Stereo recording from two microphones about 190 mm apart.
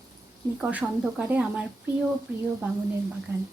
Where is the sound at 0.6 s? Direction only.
5° right (ahead or behind).